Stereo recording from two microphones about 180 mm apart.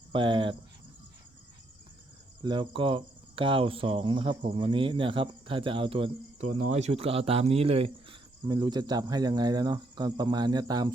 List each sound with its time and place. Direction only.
0.1 s cricket: 25° right (ahead or behind)
2.4 s cricket: 25° right (ahead or behind)